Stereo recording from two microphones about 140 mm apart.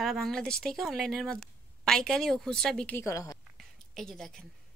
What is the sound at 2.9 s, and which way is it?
Speech, 20° left (ahead or behind).